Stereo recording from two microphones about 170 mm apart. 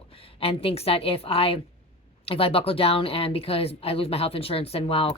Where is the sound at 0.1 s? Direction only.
35° left (ahead or behind).